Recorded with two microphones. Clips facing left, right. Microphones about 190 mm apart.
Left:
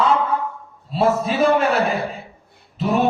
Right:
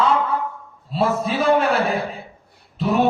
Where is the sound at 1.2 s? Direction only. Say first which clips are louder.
Left 1 dB; centre (ahead or behind).